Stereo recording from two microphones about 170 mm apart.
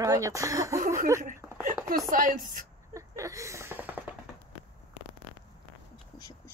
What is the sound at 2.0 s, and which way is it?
Speech, 50° right (ahead or behind).